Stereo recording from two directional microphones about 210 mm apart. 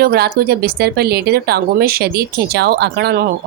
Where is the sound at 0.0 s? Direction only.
50° right (ahead or behind).